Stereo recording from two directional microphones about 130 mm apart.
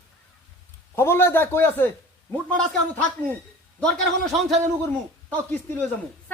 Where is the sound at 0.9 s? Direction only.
20° left (ahead or behind).